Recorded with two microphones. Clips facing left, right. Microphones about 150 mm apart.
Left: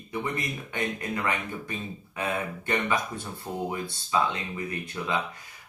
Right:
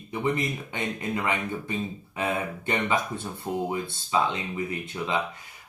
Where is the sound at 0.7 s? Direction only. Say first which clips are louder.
Left 2 dB; 20° right (ahead or behind).